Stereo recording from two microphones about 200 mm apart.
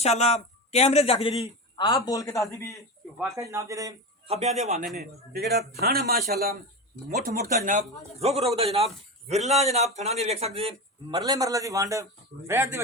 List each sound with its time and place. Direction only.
0.0 s speech: 35° left (ahead or behind)
1.7 s a man's voice: 20° left (ahead or behind)
3.3 s a man's voice: 15° right (ahead or behind)
4.3 s speech: 35° right (ahead or behind)
4.9 s a man's voice: 50° right (ahead or behind); by 11.2 s 30° right (ahead or behind)
11.2 s a man's voice: 20° right (ahead or behind)